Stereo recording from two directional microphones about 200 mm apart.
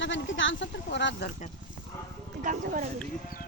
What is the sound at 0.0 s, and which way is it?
Speech, 65° left (ahead or behind).